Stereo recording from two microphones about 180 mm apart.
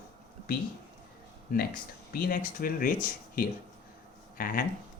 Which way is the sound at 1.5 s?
55° left (ahead or behind).